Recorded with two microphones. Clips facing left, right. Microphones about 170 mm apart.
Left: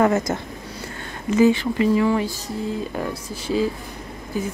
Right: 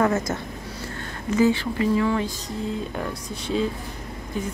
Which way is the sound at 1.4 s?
15° left (ahead or behind).